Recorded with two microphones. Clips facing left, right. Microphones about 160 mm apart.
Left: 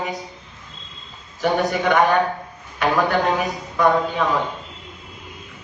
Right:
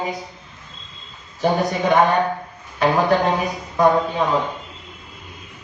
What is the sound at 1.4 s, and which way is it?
Speech, 30° right (ahead or behind).